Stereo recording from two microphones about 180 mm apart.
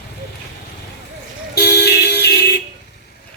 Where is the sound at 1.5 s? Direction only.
65° left (ahead or behind).